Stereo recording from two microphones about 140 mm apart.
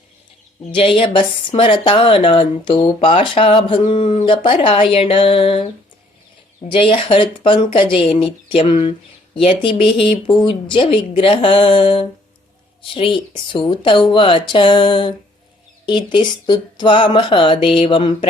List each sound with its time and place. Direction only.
0.8 s speech: 40° left (ahead or behind)
6.7 s speech: 40° left (ahead or behind)